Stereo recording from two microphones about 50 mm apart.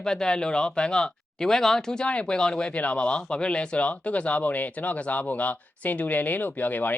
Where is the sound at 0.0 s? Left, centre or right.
Centre.